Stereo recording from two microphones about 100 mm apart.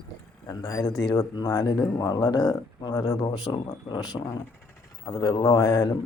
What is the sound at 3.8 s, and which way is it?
Speech, 45° left (ahead or behind).